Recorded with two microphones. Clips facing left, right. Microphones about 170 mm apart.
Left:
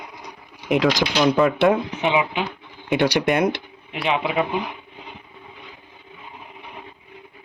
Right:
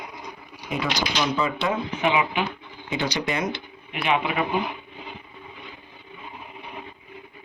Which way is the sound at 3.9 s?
30° left (ahead or behind).